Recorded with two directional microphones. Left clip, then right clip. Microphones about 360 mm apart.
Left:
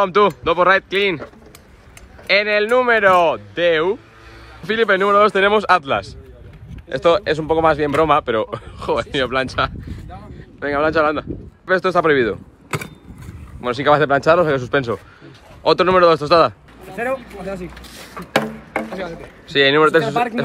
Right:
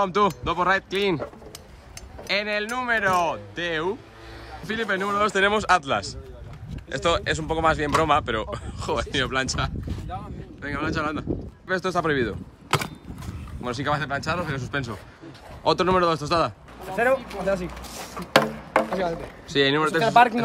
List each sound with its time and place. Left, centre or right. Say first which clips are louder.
0.0 s speech: left 7 dB; centre
2.2 s speech: left 10 dB; centre
18.3 s chop: right 1 dB; centre
18.9 s speech: right 2 dB; right
19.5 s speech: left 8 dB; centre